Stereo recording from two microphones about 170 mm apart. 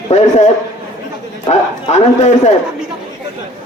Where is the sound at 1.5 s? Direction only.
40° left (ahead or behind).